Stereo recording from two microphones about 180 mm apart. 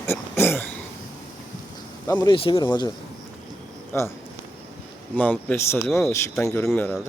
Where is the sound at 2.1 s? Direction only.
25° left (ahead or behind).